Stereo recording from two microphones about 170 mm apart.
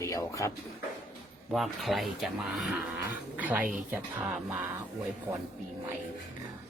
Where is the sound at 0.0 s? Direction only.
20° left (ahead or behind).